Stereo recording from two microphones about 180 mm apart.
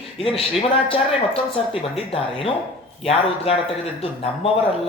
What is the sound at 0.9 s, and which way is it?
A woman's voice, 30° left (ahead or behind).